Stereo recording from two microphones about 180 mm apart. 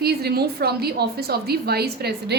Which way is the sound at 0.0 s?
60° right (ahead or behind).